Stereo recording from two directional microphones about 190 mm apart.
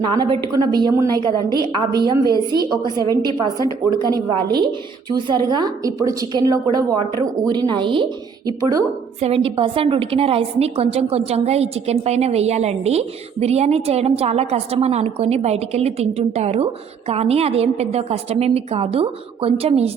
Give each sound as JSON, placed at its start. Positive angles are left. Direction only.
{"t": 0.1, "sound": "a woman's voice", "side_deg": -20}
{"t": 9.2, "sound": "a woman's voice", "side_deg": -30}